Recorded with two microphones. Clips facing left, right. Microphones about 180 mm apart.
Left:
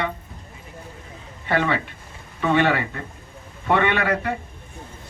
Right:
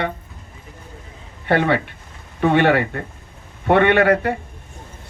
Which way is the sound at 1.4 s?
60° right (ahead or behind).